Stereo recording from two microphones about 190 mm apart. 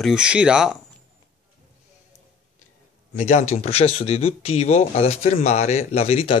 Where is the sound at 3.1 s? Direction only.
40° left (ahead or behind).